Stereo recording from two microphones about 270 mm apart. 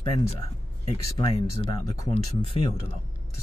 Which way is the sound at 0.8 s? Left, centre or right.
Left.